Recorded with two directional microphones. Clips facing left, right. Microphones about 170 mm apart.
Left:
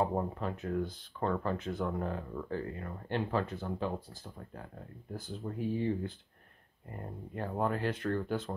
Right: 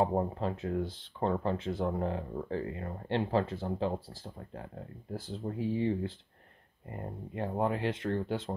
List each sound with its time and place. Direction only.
0.0 s speech: 30° right (ahead or behind)
5.3 s speech: 30° right (ahead or behind)